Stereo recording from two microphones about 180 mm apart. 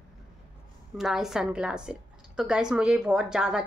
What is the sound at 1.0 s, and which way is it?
A woman's voice, centre (ahead or behind).